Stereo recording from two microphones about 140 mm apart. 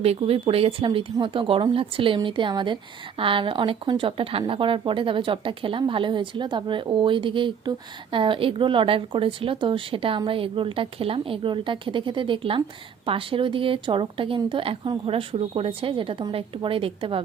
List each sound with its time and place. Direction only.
0.0 s a woman's voice: 45° right (ahead or behind)